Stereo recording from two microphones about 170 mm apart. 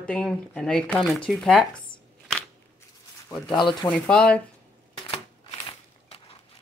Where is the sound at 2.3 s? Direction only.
10° left (ahead or behind).